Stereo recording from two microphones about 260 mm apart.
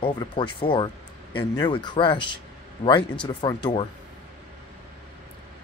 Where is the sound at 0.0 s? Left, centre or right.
Centre.